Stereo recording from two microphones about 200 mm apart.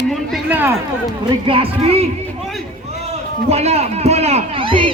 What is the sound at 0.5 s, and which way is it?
Speech, 10° right (ahead or behind).